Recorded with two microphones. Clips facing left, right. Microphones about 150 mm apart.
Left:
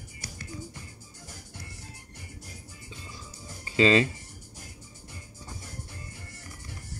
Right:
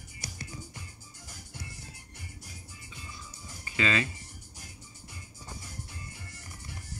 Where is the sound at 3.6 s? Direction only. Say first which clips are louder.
Left 8 dB; 30° left (ahead or behind).